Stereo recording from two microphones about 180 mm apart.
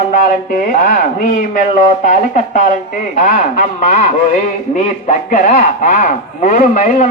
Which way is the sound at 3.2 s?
45° left (ahead or behind).